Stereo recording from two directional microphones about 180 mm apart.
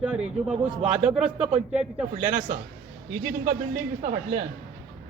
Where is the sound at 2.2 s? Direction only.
45° right (ahead or behind).